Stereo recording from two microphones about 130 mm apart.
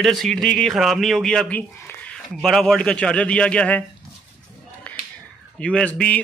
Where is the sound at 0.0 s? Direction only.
Centre (ahead or behind).